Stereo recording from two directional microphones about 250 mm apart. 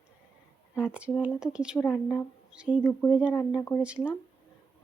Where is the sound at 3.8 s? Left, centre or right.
Centre.